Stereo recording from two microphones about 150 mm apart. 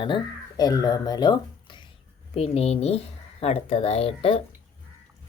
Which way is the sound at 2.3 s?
45° left (ahead or behind).